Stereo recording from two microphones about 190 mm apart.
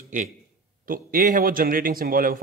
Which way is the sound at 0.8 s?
45° right (ahead or behind).